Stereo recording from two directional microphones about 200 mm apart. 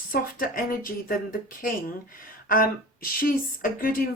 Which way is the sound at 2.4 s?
45° left (ahead or behind).